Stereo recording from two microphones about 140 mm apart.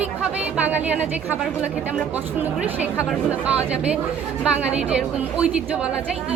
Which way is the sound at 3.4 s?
10° right (ahead or behind).